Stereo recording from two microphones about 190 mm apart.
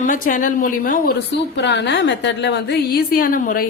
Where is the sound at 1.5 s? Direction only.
65° left (ahead or behind).